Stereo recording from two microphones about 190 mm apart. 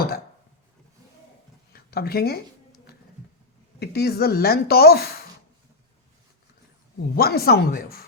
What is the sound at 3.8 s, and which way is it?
Speech, 55° left (ahead or behind).